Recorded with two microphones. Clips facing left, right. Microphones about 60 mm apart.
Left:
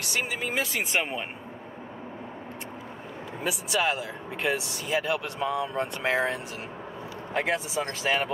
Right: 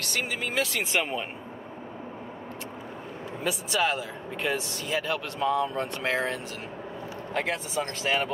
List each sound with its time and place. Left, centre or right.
0.0 s speech: centre
3.4 s speech: centre
4.8 s speech: centre